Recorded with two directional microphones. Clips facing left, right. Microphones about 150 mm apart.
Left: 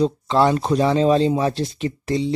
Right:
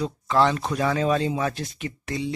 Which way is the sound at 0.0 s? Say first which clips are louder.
Left 4 dB; 25° left (ahead or behind).